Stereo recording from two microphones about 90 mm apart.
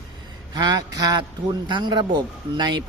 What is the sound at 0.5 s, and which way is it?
Speech, 50° right (ahead or behind).